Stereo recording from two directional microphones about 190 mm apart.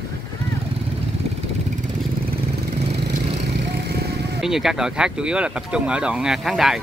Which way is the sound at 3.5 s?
60° right (ahead or behind).